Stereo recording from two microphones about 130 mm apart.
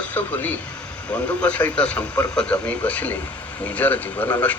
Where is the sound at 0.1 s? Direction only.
10° left (ahead or behind).